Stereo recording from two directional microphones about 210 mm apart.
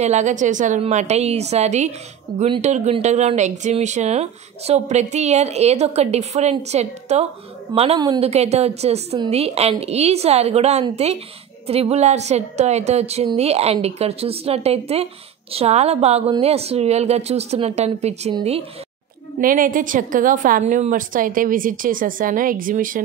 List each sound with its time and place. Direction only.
0.0 s a woman's voice: 35° right (ahead or behind)
19.4 s speech: 40° right (ahead or behind)